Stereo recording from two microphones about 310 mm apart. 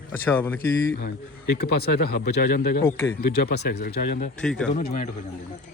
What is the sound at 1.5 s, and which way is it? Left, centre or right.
Speech, left.